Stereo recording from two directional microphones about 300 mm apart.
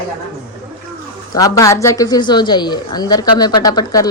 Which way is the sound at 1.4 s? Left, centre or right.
Centre.